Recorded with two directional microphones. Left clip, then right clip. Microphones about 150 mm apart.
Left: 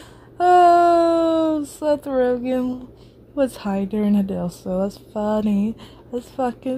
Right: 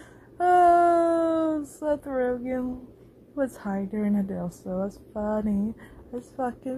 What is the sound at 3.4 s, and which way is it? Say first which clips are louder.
A woman's voice: left 7 dB; 20° left (ahead or behind).